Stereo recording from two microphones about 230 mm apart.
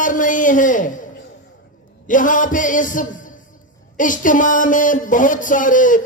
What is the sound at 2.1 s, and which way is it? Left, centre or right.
Speech, left.